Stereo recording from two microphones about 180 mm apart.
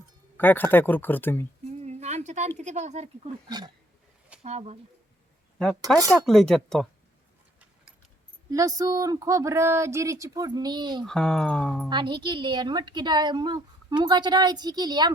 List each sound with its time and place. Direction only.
0.3 s speech: 10° left (ahead or behind)
1.8 s a sound: 35° right (ahead or behind)
2.6 s speech: 40° right (ahead or behind)
4.4 s speech: 40° right (ahead or behind)
6.0 s speech: 20° right (ahead or behind)
6.2 s speech: centre (ahead or behind)
8.4 s speech: 20° right (ahead or behind)
11.0 s speech: 5° left (ahead or behind)
11.9 s speech: 25° right (ahead or behind)